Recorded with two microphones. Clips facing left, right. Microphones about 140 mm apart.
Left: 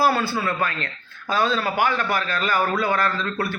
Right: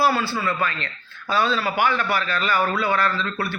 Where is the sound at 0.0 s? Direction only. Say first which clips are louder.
Even; 50° left (ahead or behind).